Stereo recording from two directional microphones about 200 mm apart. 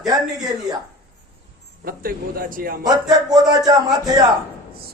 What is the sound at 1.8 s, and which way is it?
Speech, 45° right (ahead or behind).